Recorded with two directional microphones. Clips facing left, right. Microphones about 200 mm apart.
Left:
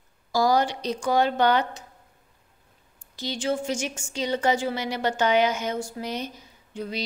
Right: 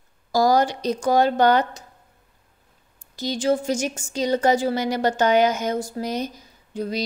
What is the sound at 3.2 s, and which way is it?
A woman's voice, 40° right (ahead or behind).